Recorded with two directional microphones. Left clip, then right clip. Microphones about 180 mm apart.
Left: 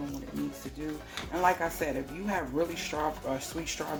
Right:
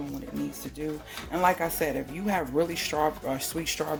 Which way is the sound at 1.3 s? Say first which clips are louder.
Right 3 dB; 55° right (ahead or behind).